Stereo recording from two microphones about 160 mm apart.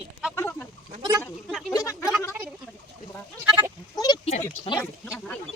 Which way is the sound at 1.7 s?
20° left (ahead or behind).